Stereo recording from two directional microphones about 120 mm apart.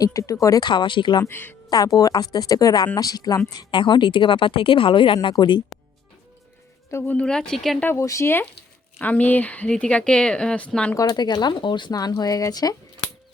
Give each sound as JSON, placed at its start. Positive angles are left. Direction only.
{"t": 0.0, "sound": "speech", "side_deg": 25}
{"t": 0.7, "sound": "speech", "side_deg": 40}
{"t": 1.2, "sound": "speech", "side_deg": 15}
{"t": 1.7, "sound": "speech", "side_deg": 30}
{"t": 6.9, "sound": "speech", "side_deg": 15}
{"t": 7.9, "sound": "speech", "side_deg": 25}
{"t": 10.9, "sound": "speech", "side_deg": 35}